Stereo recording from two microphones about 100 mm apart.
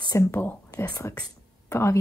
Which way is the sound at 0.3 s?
20° left (ahead or behind).